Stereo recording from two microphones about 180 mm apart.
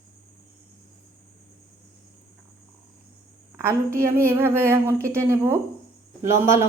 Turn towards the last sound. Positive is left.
turn(degrees=-15)  # may be behind; listen again after turning